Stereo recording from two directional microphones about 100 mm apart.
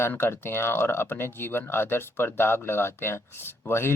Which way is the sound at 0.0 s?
25° left (ahead or behind).